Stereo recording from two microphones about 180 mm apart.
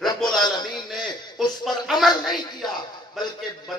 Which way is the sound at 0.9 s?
Centre (ahead or behind).